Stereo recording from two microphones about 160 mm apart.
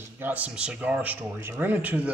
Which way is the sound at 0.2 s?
10° right (ahead or behind).